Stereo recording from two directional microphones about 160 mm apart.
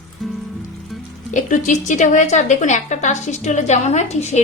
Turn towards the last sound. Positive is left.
turn(degrees=45)  # may be behind; listen again after turning